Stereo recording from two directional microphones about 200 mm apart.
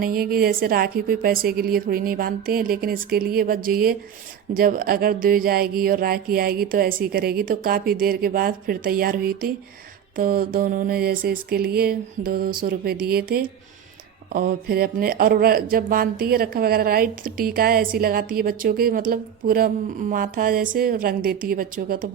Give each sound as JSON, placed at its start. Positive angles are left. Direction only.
{"t": 0.0, "sound": "speech", "side_deg": -45}